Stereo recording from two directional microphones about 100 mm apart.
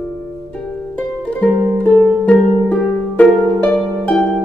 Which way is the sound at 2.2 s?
15° left (ahead or behind).